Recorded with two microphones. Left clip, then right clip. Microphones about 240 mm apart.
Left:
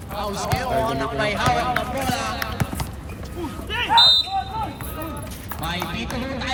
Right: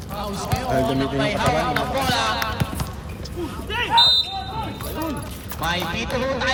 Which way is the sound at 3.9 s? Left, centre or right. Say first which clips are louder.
Left 2 dB; centre.